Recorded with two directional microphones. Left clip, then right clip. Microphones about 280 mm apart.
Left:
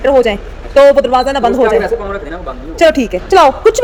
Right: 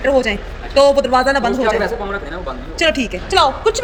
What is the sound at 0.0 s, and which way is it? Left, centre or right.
A woman's voice, centre.